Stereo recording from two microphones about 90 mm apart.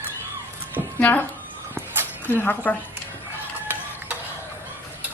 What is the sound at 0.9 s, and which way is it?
Speech, 20° left (ahead or behind).